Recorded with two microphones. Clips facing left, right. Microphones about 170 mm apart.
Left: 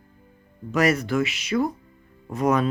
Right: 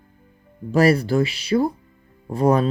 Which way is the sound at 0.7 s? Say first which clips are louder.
Right 4 dB; 35° right (ahead or behind).